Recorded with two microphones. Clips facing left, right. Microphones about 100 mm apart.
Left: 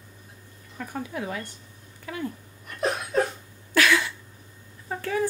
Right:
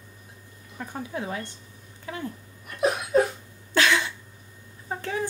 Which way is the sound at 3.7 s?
25° right (ahead or behind).